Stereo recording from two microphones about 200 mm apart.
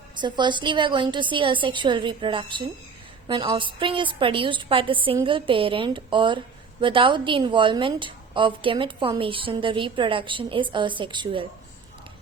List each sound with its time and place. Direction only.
0.2 s a woman's voice: 20° right (ahead or behind)